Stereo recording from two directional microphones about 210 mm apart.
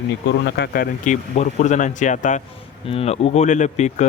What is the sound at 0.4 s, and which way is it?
Speech, 50° left (ahead or behind).